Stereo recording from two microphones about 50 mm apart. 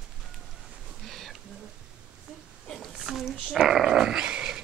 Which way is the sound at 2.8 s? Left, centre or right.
Centre.